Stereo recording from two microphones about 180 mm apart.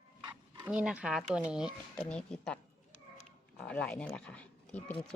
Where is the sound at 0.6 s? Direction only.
5° right (ahead or behind).